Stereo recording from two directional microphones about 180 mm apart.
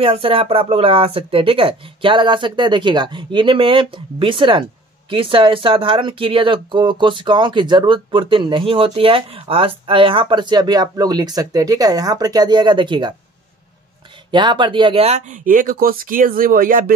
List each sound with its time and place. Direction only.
0.0 s speech: 30° right (ahead or behind)
14.3 s speech: 25° right (ahead or behind); by 16.9 s 50° right (ahead or behind)